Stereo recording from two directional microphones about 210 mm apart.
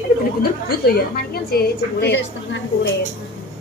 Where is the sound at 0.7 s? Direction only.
45° left (ahead or behind).